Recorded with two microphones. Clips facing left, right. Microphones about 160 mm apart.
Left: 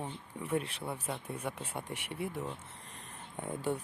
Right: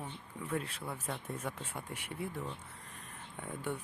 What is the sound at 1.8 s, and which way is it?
Speech, 30° left (ahead or behind).